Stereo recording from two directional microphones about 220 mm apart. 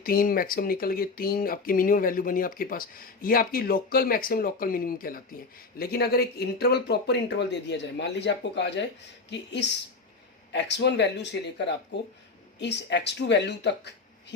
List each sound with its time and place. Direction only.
0.0 s speech: 40° left (ahead or behind)